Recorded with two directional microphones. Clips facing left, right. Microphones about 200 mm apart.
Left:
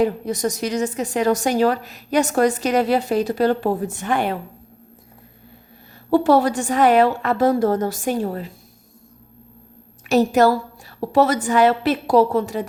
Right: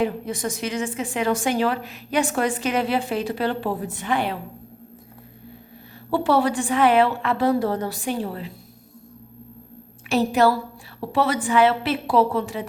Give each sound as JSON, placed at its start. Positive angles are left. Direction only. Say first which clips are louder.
{"t": 0.0, "sound": "speech", "louder": "left 4 dB", "side_deg": 40}
{"t": 6.1, "sound": "a woman's voice", "louder": "left 4 dB", "side_deg": 40}
{"t": 10.1, "sound": "a woman's voice", "louder": "left 3 dB", "side_deg": 45}